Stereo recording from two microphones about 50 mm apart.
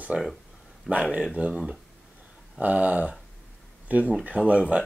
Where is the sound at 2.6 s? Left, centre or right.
Right.